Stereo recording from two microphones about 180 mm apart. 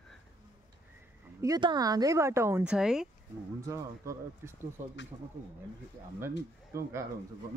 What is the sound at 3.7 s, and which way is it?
A woman's voice, 15° right (ahead or behind).